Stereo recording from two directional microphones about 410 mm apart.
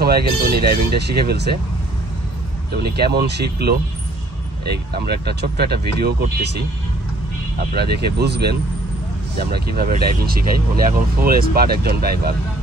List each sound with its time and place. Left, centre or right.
0.0 s speech: right
2.7 s speech: right
7.7 s speech: right